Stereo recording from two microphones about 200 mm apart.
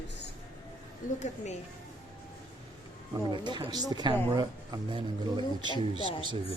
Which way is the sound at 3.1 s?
20° right (ahead or behind).